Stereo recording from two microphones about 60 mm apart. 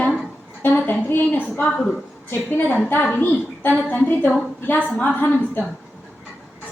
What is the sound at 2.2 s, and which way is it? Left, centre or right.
A woman's voice, left.